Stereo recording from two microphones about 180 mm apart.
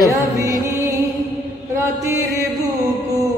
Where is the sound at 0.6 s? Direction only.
15° right (ahead or behind).